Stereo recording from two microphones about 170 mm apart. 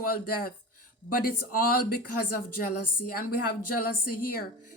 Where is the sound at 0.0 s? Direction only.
60° left (ahead or behind).